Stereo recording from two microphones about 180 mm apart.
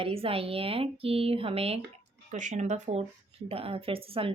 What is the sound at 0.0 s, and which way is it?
Speech, 30° right (ahead or behind).